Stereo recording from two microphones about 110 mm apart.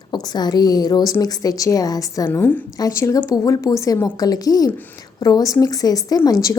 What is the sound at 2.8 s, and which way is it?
A woman's voice, 30° left (ahead or behind).